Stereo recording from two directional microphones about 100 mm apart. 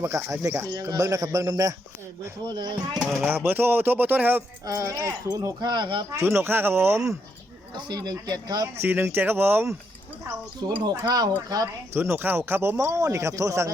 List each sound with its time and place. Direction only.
0.0 s a man's voice: 25° right (ahead or behind)
2.6 s speech: 45° right (ahead or behind)
3.2 s speech: 20° right (ahead or behind)
4.6 s a man's voice: 35° right (ahead or behind); by 6.1 s 50° right (ahead or behind)
6.1 s speech: 30° right (ahead or behind)
7.9 s a man's voice: 40° right (ahead or behind)
8.8 s speech: 20° right (ahead or behind)
10.8 s a man's voice: 40° right (ahead or behind)
11.9 s speech: 20° right (ahead or behind)